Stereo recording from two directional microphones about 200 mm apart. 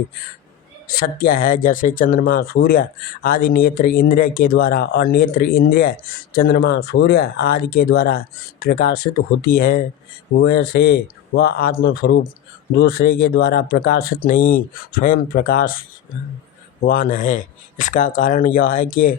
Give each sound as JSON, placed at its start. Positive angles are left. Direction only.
{"t": 0.9, "sound": "speech", "side_deg": 50}
{"t": 16.8, "sound": "speech", "side_deg": 45}